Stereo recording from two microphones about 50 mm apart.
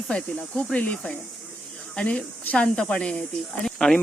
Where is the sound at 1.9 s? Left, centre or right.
Left.